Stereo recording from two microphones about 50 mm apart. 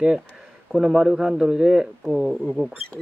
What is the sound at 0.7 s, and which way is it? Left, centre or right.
Speech, centre.